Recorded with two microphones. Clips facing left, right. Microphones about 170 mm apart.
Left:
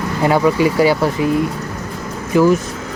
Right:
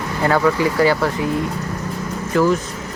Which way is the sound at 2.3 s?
15° left (ahead or behind).